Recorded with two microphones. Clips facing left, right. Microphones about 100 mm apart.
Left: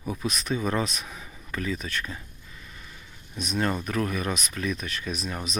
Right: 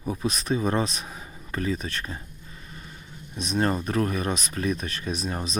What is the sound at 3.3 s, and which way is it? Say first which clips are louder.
Speech: right 2 dB; 35° right (ahead or behind).